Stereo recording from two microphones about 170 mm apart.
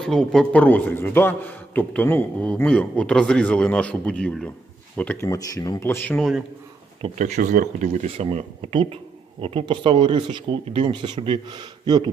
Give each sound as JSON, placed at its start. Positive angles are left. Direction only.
{"t": 0.0, "sound": "a man's voice", "side_deg": 5}
{"t": 6.1, "sound": "a man's voice", "side_deg": 0}
{"t": 7.2, "sound": "speech", "side_deg": -45}